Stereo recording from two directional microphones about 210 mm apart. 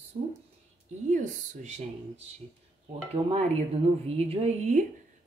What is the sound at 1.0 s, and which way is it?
Speech, 35° right (ahead or behind).